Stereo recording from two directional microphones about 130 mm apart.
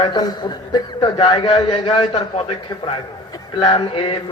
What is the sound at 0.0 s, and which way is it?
A man's voice, 35° left (ahead or behind).